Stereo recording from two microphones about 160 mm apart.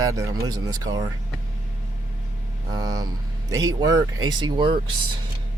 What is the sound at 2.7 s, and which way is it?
Speech, 25° right (ahead or behind).